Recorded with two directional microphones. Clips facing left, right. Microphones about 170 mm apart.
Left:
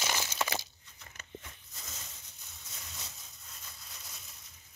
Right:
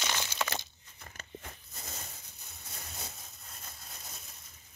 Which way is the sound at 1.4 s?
55° right (ahead or behind).